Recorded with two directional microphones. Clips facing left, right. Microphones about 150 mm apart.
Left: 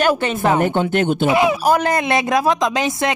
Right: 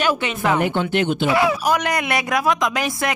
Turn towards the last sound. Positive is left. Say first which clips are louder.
# left 3 dB
turn(degrees=25)  # may be behind; listen again after turning